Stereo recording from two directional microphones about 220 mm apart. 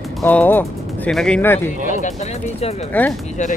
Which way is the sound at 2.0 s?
30° left (ahead or behind).